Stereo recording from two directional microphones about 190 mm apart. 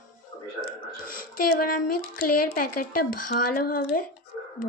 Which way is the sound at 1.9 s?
50° left (ahead or behind).